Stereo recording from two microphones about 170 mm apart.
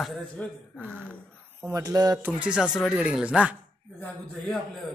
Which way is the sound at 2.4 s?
5° right (ahead or behind).